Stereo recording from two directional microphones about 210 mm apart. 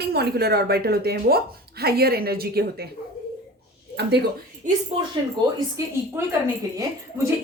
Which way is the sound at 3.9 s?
50° right (ahead or behind).